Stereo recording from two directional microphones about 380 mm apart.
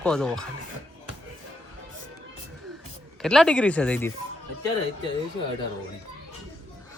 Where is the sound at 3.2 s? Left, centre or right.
Centre.